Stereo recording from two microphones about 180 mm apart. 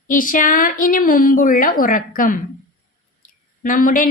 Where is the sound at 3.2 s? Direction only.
50° left (ahead or behind).